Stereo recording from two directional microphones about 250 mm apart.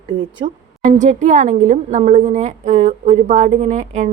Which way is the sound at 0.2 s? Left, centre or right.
Centre.